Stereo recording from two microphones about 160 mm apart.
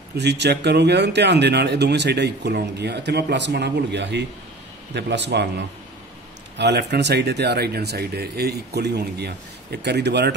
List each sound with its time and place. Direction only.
0.2 s speech: 90° right
6.6 s speech: 90° right